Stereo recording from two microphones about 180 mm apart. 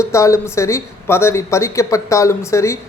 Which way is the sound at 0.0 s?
15° left (ahead or behind).